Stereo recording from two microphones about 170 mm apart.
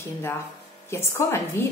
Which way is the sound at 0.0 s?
15° left (ahead or behind).